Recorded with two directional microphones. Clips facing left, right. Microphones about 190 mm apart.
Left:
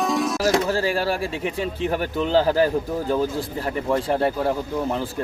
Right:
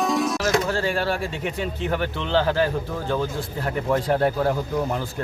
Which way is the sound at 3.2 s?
35° left (ahead or behind).